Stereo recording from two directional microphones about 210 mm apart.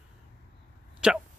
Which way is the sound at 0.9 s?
5° right (ahead or behind).